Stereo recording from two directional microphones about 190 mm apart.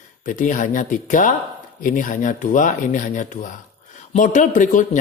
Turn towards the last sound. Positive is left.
turn(degrees=40)  # may be behind; listen again after turning